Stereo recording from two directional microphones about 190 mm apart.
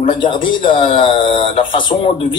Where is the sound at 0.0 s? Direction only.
25° left (ahead or behind).